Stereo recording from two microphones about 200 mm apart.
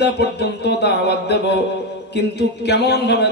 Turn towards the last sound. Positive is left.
turn(degrees=55)  # may be behind; listen again after turning